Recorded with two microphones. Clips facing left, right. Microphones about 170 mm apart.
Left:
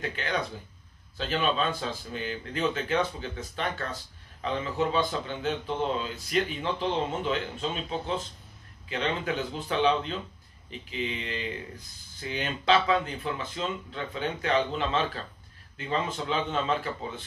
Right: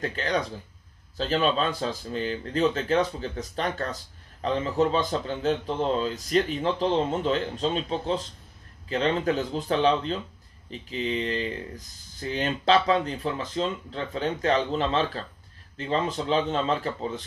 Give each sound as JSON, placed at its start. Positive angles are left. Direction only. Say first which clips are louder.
{"t": 0.0, "sound": "speech", "louder": "right 4 dB", "side_deg": -40}